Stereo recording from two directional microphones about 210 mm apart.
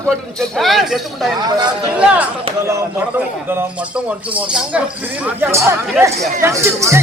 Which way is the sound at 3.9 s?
5° right (ahead or behind).